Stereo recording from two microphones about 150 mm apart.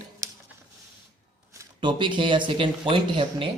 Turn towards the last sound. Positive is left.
turn(degrees=-35)  # may be behind; listen again after turning